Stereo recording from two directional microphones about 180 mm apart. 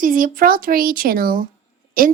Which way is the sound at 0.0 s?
50° right (ahead or behind).